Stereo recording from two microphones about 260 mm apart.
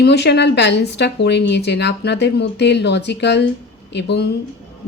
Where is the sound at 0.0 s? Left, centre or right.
Left.